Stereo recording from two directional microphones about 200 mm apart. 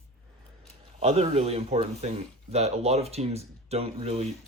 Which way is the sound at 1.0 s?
30° right (ahead or behind).